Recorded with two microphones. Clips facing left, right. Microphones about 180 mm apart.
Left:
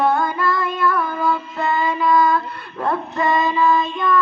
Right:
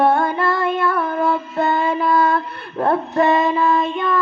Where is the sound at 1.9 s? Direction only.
30° right (ahead or behind).